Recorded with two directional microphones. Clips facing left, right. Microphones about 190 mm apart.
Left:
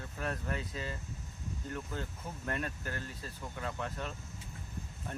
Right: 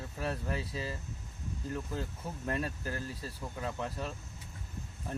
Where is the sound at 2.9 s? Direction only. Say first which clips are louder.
Right 3 dB; 35° right (ahead or behind).